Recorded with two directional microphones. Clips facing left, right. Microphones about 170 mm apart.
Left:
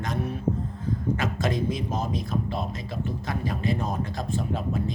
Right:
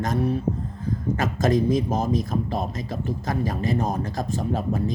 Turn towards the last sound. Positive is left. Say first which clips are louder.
# right 4 dB
turn(degrees=-40)  # may be behind; listen again after turning